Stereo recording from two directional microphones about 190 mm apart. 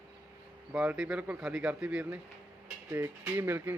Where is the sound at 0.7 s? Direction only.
5° right (ahead or behind).